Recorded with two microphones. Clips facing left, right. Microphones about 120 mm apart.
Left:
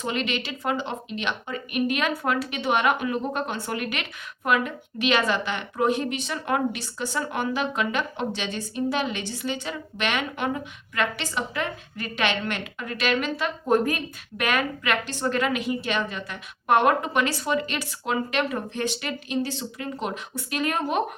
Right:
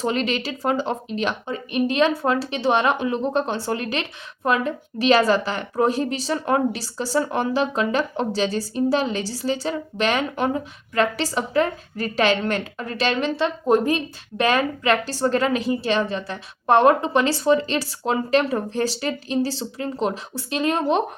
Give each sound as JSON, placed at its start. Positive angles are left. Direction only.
{"t": 0.0, "sound": "a woman's voice", "side_deg": -35}